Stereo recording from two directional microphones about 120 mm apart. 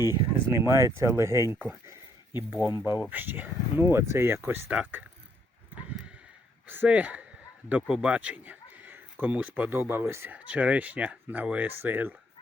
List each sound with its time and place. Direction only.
0.0 s speech: 20° right (ahead or behind)
2.8 s speech: 15° right (ahead or behind)
6.7 s a man's voice: 15° right (ahead or behind)
10.3 s speech: 10° right (ahead or behind)